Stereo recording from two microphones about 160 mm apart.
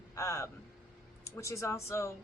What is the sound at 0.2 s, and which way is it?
A woman's voice, 20° left (ahead or behind).